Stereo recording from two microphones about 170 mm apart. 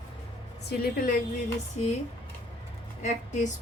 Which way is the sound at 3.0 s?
45° left (ahead or behind).